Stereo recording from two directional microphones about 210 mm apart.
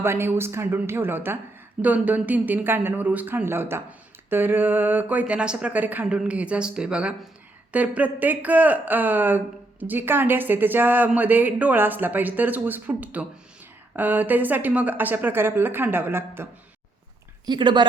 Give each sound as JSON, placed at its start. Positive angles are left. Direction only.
{"t": 0.0, "sound": "speech", "side_deg": -10}
{"t": 17.4, "sound": "speech", "side_deg": -20}